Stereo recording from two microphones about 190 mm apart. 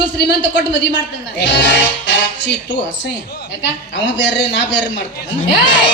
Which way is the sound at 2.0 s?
70° left (ahead or behind).